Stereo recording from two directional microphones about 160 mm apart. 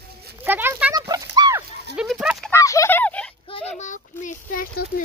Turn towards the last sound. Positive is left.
turn(degrees=60)  # may be behind; listen again after turning